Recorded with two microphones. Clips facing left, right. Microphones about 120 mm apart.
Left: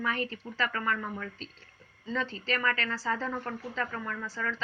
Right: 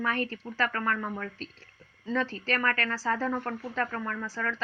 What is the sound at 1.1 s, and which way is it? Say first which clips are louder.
A woman's voice: right 2 dB; 50° right (ahead or behind).